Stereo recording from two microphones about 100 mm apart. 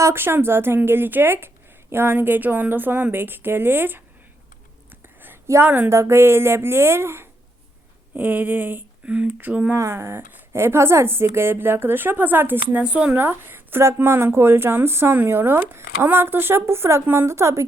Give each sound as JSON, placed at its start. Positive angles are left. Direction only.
{"t": 0.0, "sound": "speech", "side_deg": -25}
{"t": 4.9, "sound": "a sound", "side_deg": -20}
{"t": 5.9, "sound": "speech", "side_deg": -30}
{"t": 9.7, "sound": "speech", "side_deg": -30}